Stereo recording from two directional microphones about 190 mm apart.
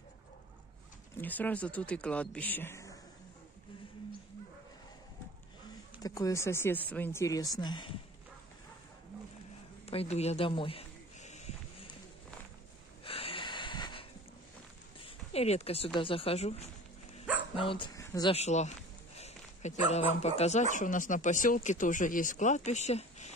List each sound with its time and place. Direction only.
1.2 s speech: 10° left (ahead or behind)
6.0 s speech: 20° left (ahead or behind)
9.8 s a sound: 35° left (ahead or behind)
13.0 s wheeze: 30° left (ahead or behind)
15.0 s speech: 30° left (ahead or behind)
18.3 s speech: 35° left (ahead or behind)